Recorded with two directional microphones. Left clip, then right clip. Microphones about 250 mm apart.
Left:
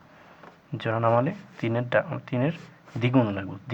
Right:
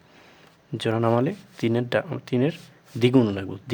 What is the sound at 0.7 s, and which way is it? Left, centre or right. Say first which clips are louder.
Speech: even; right.